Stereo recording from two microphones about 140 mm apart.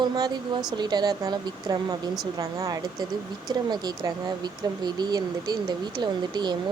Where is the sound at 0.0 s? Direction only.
30° right (ahead or behind).